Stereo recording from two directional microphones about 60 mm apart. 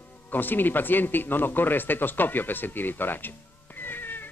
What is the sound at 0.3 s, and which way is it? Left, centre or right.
Speech, left.